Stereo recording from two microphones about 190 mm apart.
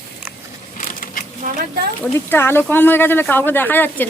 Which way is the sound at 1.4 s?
40° right (ahead or behind).